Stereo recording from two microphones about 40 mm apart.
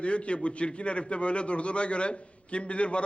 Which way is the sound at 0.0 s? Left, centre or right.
Left.